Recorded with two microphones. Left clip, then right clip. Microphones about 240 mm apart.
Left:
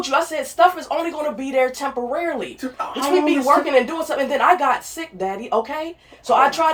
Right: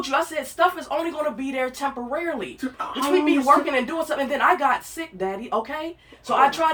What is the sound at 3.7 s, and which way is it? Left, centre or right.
Speech, right.